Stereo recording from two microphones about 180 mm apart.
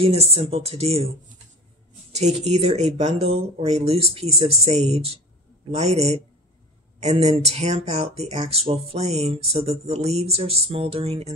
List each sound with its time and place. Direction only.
0.0 s speech: 35° right (ahead or behind)
2.1 s speech: 40° right (ahead or behind)